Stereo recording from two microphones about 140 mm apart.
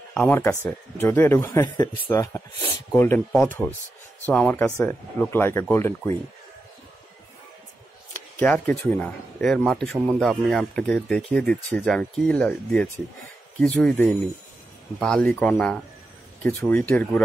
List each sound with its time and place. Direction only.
0.3 s speech: 15° left (ahead or behind)
3.3 s speech: 5° left (ahead or behind)
8.4 s speech: 10° left (ahead or behind)
15.0 s speech: 5° left (ahead or behind)